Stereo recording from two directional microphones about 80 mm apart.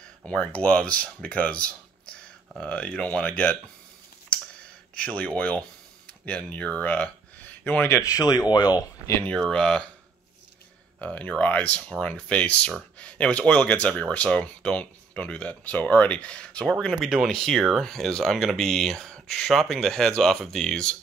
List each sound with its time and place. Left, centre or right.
0.2 s speech: centre
4.9 s speech: centre
7.9 s speech: left
9.2 s speech: centre
11.0 s speech: centre